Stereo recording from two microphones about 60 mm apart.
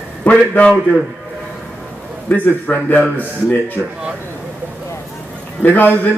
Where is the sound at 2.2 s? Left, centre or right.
Left.